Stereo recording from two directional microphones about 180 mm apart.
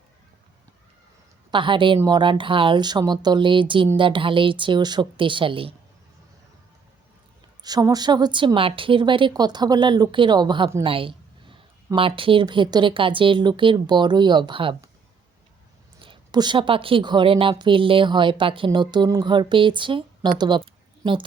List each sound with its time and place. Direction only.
1.5 s a woman's voice: 25° right (ahead or behind)
7.6 s a woman's voice: 20° right (ahead or behind)
10.8 s a sound: 30° right (ahead or behind)
11.9 s a woman's voice: 30° right (ahead or behind)
16.0 s a woman's voice: 25° right (ahead or behind)
20.4 s a sound: 25° right (ahead or behind)